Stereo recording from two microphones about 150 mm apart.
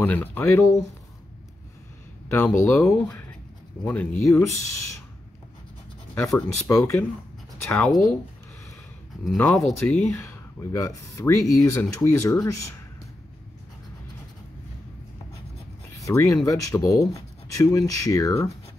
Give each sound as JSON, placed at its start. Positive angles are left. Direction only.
{"t": 0.0, "sound": "speech", "side_deg": 15}
{"t": 2.2, "sound": "speech", "side_deg": 15}
{"t": 6.2, "sound": "speech", "side_deg": 15}
{"t": 9.4, "sound": "speech", "side_deg": 5}
{"t": 16.0, "sound": "speech", "side_deg": 20}